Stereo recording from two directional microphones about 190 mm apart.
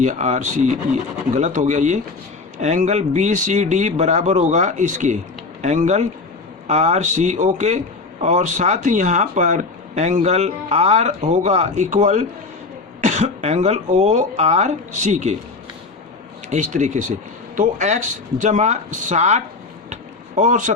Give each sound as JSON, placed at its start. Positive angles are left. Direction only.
{"t": 0.0, "sound": "speech", "side_deg": -40}
{"t": 16.5, "sound": "speech", "side_deg": -40}
{"t": 19.9, "sound": "a sound", "side_deg": -40}